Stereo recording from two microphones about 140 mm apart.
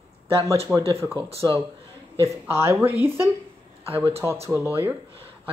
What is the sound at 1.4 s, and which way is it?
Speech, 25° right (ahead or behind).